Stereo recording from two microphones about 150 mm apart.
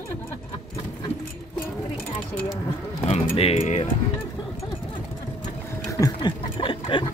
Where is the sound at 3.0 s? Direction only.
45° left (ahead or behind).